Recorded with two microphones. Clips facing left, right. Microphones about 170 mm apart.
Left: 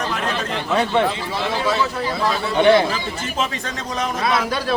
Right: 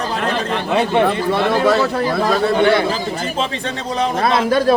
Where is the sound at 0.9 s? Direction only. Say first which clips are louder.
Right 5 dB; 55° right (ahead or behind).